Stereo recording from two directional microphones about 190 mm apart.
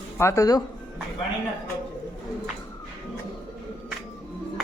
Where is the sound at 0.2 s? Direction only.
15° left (ahead or behind).